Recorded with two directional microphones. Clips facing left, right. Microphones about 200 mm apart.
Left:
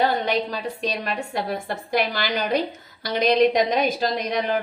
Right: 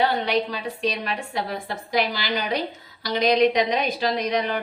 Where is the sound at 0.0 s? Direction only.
45° left (ahead or behind).